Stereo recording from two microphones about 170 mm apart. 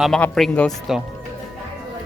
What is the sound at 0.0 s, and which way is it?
Speech, centre (ahead or behind).